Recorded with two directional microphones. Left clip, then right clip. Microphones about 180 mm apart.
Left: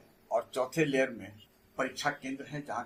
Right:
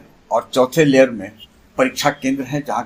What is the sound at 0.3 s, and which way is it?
Speech, 35° right (ahead or behind).